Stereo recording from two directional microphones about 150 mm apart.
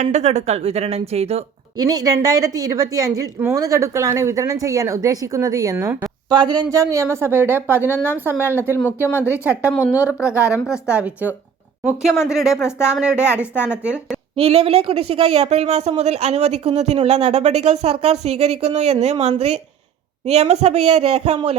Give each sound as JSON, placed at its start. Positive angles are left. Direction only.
{"t": 0.0, "sound": "speech", "side_deg": -50}
{"t": 1.8, "sound": "a woman's voice", "side_deg": -25}
{"t": 9.0, "sound": "a woman's voice", "side_deg": 15}
{"t": 9.4, "sound": "a woman's voice", "side_deg": -10}
{"t": 9.8, "sound": "a woman's voice", "side_deg": 20}
{"t": 10.2, "sound": "a woman's voice", "side_deg": -5}
{"t": 13.2, "sound": "a woman's voice", "side_deg": 15}
{"t": 13.6, "sound": "a woman's voice", "side_deg": -5}
{"t": 14.3, "sound": "speech", "side_deg": -40}